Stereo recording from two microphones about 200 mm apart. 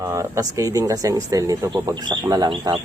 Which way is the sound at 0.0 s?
15° right (ahead or behind).